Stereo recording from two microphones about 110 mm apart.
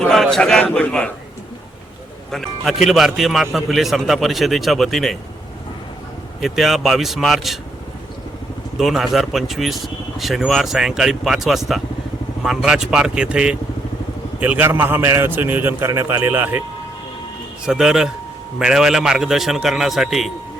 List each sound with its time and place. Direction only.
0.0 s a sound: 5° left (ahead or behind)
0.6 s a man's voice: 10° left (ahead or behind)
2.3 s speech: centre (ahead or behind)
6.4 s speech: centre (ahead or behind)
8.8 s a man's voice: centre (ahead or behind); by 16.6 s 20° right (ahead or behind)
17.7 s speech: 5° right (ahead or behind)